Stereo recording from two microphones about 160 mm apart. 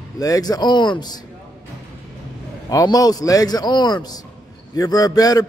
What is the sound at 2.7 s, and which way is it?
A man's voice, 25° left (ahead or behind).